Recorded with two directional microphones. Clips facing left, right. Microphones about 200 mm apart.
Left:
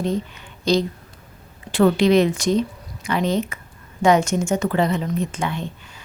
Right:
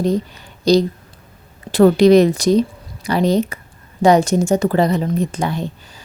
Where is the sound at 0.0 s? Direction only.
40° right (ahead or behind).